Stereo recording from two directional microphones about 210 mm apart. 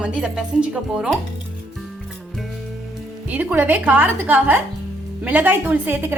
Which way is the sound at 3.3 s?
5° right (ahead or behind).